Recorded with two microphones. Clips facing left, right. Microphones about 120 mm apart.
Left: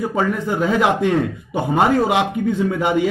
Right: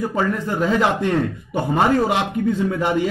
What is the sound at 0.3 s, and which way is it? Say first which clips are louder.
A man's voice: left 1 dB; 15° left (ahead or behind).